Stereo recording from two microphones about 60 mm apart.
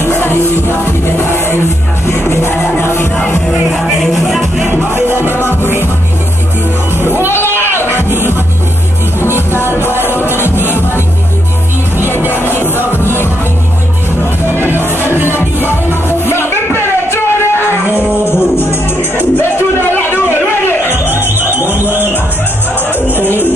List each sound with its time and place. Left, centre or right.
1.0 s music: left
4.0 s music: centre
4.6 s music: right
5.3 s music: left
7.9 s music: right
10.0 s music: left
10.5 s music: right
12.6 s music: left
15.9 s music: left
19.9 s a sound: left
21.1 s music: right